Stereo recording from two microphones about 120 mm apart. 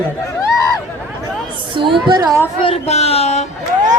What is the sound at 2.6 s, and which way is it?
Speech, 60° left (ahead or behind).